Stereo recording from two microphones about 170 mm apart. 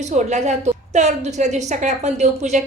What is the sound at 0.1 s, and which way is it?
A woman's voice, 40° right (ahead or behind).